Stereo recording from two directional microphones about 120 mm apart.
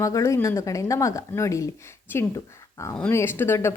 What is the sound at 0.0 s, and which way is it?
Speech, 25° left (ahead or behind).